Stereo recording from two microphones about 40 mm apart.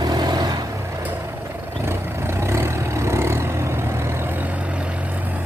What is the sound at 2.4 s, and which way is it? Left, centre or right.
Vehicle, right.